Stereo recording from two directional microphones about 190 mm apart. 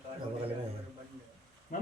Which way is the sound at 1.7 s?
45° left (ahead or behind).